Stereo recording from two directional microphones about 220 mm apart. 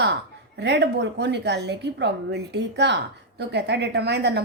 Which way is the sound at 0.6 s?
50° right (ahead or behind).